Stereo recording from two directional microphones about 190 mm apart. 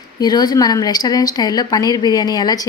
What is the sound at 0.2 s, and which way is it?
A woman's voice, 20° left (ahead or behind).